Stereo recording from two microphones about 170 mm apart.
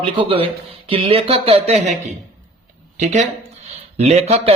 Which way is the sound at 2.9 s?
40° right (ahead or behind).